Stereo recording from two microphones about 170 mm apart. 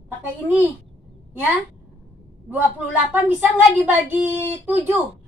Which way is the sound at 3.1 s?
10° right (ahead or behind).